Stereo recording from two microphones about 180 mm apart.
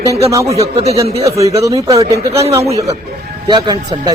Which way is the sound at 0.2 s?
15° right (ahead or behind).